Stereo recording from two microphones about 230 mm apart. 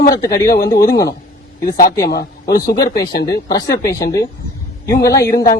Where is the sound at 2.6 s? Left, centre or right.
Centre.